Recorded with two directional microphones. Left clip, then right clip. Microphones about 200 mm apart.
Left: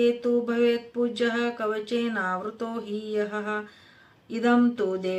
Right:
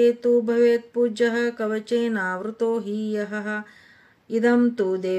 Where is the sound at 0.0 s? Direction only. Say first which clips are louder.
Right 5 dB; 45° right (ahead or behind).